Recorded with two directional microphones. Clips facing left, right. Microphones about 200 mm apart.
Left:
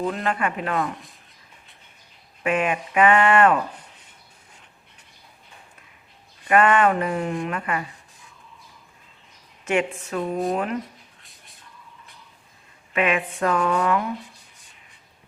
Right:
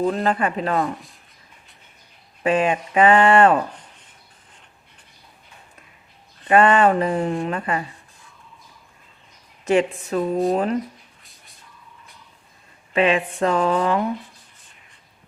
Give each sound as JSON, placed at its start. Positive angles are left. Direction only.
{"t": 0.0, "sound": "speech", "side_deg": -35}
{"t": 2.4, "sound": "speech", "side_deg": -30}
{"t": 6.5, "sound": "speech", "side_deg": -30}
{"t": 9.6, "sound": "speech", "side_deg": -35}
{"t": 11.2, "sound": "whispering", "side_deg": 0}
{"t": 12.9, "sound": "speech", "side_deg": -30}